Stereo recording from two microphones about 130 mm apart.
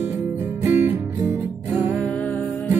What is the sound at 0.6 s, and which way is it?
Music, 15° right (ahead or behind).